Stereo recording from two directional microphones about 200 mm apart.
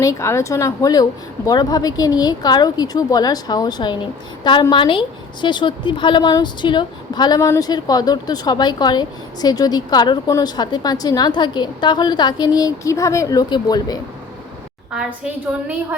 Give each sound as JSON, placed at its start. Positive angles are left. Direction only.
{"t": 0.0, "sound": "a woman's voice", "side_deg": 15}